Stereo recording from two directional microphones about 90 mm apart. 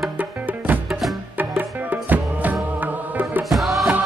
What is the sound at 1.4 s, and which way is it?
Music, 20° right (ahead or behind).